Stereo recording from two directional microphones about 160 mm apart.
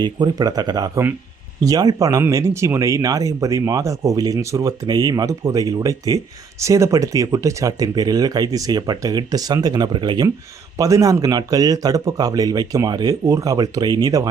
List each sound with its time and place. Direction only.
0.0 s speech: 25° right (ahead or behind)